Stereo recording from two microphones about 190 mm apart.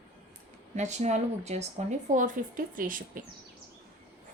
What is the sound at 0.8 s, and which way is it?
Speech, 40° right (ahead or behind).